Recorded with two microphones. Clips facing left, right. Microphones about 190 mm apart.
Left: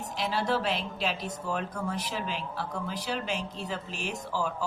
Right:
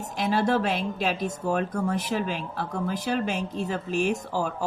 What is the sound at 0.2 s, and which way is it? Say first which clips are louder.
Speech: right 6 dB; 50° right (ahead or behind).